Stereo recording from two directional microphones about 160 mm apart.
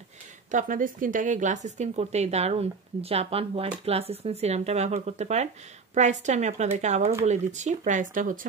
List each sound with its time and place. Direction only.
0.5 s speech: 55° right (ahead or behind)